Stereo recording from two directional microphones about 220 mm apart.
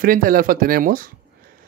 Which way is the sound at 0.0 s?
40° right (ahead or behind).